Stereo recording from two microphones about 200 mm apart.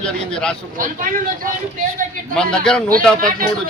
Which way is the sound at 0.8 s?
40° right (ahead or behind).